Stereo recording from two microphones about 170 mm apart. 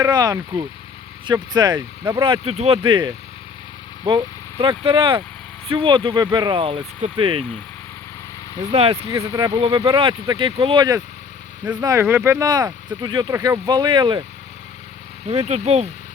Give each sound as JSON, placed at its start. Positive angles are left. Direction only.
{"t": 0.1, "sound": "speech", "side_deg": -20}
{"t": 8.7, "sound": "speech", "side_deg": -35}
{"t": 9.1, "sound": "speech", "side_deg": -20}
{"t": 15.3, "sound": "speech", "side_deg": -40}